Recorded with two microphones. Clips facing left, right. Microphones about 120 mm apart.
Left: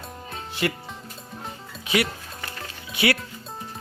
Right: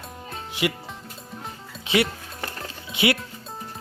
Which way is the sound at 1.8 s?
25° right (ahead or behind).